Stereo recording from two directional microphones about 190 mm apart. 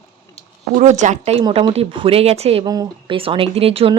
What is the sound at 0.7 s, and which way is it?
Speech, 40° right (ahead or behind).